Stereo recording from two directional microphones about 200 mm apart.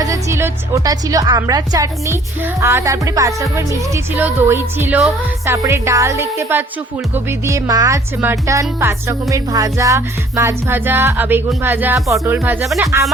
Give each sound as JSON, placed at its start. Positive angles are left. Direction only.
{"t": 0.0, "sound": "a woman's voice", "side_deg": -15}
{"t": 12.8, "sound": "a woman's voice", "side_deg": -15}